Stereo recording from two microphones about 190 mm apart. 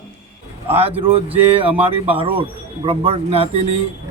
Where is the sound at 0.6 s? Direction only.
30° right (ahead or behind).